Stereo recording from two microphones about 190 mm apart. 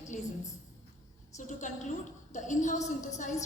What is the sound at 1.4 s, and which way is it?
A woman's voice, 40° left (ahead or behind).